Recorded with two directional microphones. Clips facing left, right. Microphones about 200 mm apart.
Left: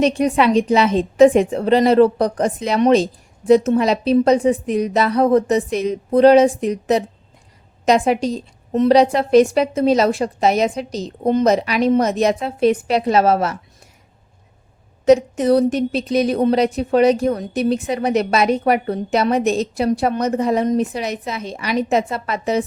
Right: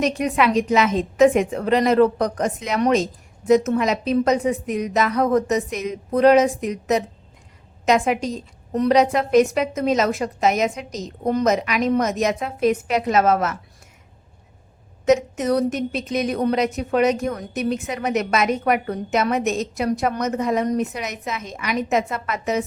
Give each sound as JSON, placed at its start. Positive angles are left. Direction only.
{"t": 0.0, "sound": "a woman's voice", "side_deg": 30}
{"t": 15.0, "sound": "a woman's voice", "side_deg": 30}